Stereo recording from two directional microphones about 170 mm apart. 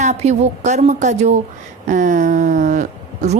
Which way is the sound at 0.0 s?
40° right (ahead or behind).